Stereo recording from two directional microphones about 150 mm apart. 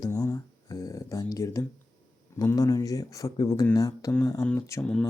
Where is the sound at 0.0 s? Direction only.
20° left (ahead or behind).